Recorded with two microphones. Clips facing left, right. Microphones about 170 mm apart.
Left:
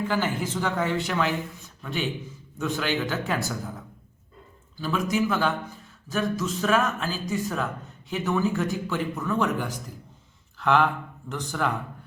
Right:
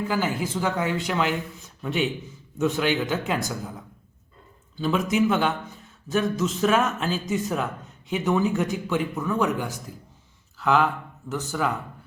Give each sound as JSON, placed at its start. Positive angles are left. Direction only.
{"t": 0.1, "sound": "speech", "side_deg": -10}